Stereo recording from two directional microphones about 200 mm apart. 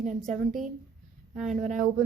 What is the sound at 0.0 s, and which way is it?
Speech, centre (ahead or behind).